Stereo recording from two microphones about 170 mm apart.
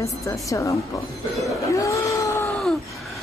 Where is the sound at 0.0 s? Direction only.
15° left (ahead or behind).